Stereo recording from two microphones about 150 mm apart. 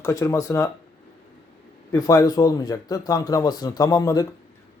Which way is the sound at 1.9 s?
25° left (ahead or behind).